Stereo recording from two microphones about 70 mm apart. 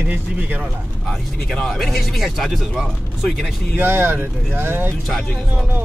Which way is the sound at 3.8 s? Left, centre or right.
Right.